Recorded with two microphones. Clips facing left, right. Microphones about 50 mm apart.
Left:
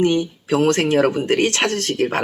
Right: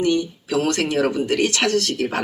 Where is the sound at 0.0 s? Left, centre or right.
Left.